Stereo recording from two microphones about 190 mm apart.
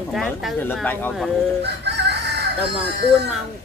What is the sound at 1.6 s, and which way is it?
Chicken, 60° right (ahead or behind).